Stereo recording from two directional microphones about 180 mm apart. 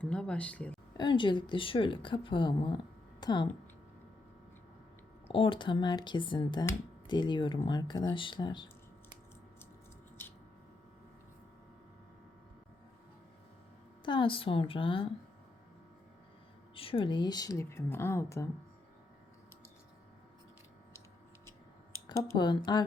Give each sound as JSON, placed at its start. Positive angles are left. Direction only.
{"t": 0.0, "sound": "speech", "side_deg": 5}
{"t": 0.9, "sound": "a woman's voice", "side_deg": 25}
{"t": 5.3, "sound": "a woman's voice", "side_deg": 30}
{"t": 10.2, "sound": "a sound", "side_deg": 10}
{"t": 14.0, "sound": "a woman's voice", "side_deg": 25}
{"t": 16.7, "sound": "speech", "side_deg": 30}
{"t": 22.1, "sound": "a woman's voice", "side_deg": 20}